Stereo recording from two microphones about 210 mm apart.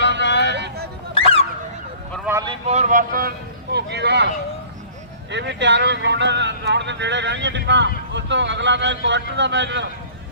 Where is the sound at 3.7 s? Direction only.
55° right (ahead or behind).